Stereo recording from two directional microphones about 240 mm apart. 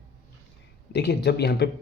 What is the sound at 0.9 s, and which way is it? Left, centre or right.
Speech, left.